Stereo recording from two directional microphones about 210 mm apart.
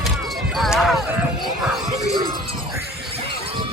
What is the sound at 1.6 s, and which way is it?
Music, centre (ahead or behind).